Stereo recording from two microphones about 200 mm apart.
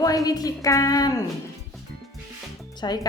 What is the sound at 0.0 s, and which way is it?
A woman's voice, 20° left (ahead or behind).